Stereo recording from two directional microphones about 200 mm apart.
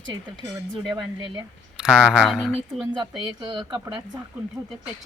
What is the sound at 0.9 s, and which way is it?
Speech, 20° right (ahead or behind).